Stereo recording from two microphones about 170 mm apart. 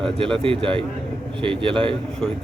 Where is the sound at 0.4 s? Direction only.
30° right (ahead or behind).